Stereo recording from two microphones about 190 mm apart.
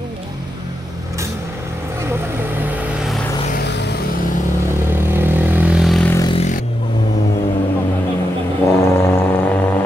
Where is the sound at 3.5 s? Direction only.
60° left (ahead or behind).